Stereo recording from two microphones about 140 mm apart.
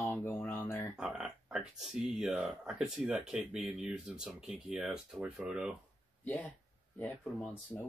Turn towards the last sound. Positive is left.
turn(degrees=10)  # may be behind; listen again after turning